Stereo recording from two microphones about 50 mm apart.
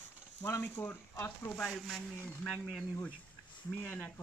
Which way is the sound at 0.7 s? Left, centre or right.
Left.